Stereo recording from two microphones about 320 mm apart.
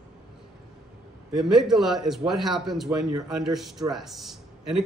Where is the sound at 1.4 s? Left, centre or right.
Centre.